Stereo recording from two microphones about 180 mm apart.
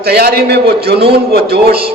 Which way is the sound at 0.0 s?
60° right (ahead or behind).